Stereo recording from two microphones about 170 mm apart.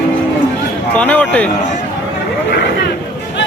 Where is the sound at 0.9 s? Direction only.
10° left (ahead or behind).